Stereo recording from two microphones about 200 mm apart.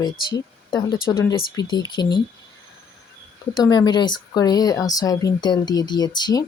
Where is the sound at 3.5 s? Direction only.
20° left (ahead or behind).